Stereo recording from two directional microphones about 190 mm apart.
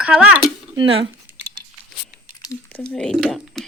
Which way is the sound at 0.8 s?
25° right (ahead or behind).